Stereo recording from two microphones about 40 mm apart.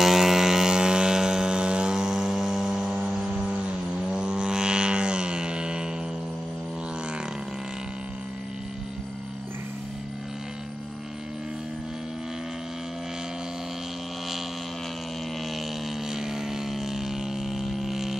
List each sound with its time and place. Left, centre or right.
0.0 s vehicle: centre; by 5.9 s right
16.1 s vehicle: centre